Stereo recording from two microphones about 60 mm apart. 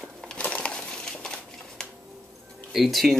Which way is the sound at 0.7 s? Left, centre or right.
Centre.